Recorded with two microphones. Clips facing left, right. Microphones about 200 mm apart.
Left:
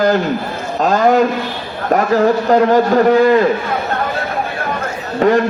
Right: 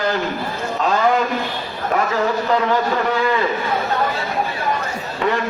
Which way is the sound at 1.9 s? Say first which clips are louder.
Left 7 dB; 45° left (ahead or behind).